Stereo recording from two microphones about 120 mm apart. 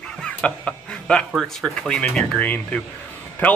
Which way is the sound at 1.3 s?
Centre (ahead or behind).